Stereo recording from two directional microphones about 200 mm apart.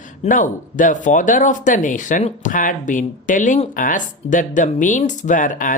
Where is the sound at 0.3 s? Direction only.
40° left (ahead or behind).